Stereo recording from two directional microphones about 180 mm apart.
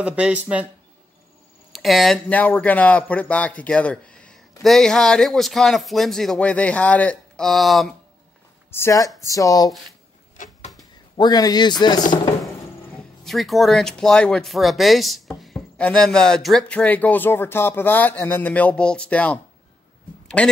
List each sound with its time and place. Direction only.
0.0 s speech: 5° right (ahead or behind)
1.7 s speech: centre (ahead or behind)
8.6 s speech: 15° left (ahead or behind)
10.3 s a sound: 45° left (ahead or behind)
11.1 s speech: 20° left (ahead or behind)
13.2 s speech: centre (ahead or behind)